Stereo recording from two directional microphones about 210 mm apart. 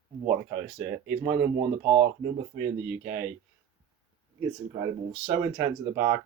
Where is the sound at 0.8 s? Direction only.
10° right (ahead or behind).